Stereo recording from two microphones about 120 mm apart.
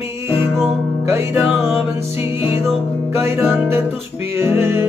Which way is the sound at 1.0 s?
20° right (ahead or behind).